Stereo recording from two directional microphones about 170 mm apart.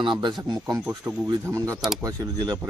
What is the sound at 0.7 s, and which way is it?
Speech, 10° right (ahead or behind).